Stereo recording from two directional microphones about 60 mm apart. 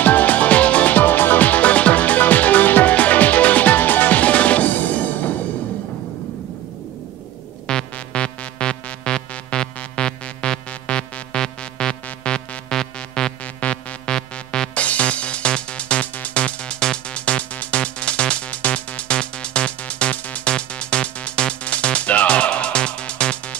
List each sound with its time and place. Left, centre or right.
0.0 s music: left
7.6 s music: centre